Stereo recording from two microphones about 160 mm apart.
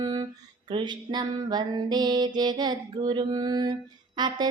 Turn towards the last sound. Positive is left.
turn(degrees=-25)  # may be behind; listen again after turning